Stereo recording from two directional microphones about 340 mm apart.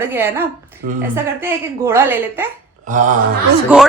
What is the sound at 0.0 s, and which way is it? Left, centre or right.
A woman's voice, centre.